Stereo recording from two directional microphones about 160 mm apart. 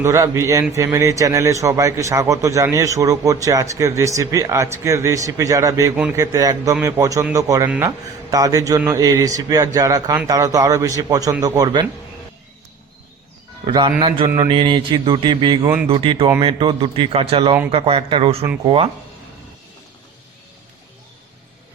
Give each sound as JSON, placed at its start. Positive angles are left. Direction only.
{"t": 0.0, "sound": "a man's voice", "side_deg": -20}
{"t": 13.7, "sound": "a man's voice", "side_deg": -30}